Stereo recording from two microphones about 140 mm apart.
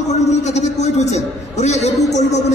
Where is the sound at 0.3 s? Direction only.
55° left (ahead or behind).